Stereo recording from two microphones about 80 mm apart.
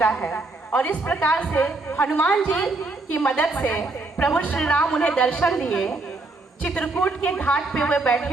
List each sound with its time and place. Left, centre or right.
0.0 s speech: centre